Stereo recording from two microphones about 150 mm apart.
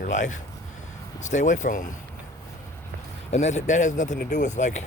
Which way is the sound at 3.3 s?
50° left (ahead or behind).